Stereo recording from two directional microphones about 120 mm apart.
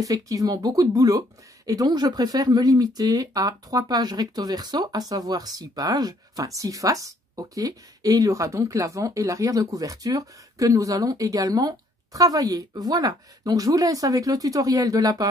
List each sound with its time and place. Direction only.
0.0 s speech: 30° right (ahead or behind)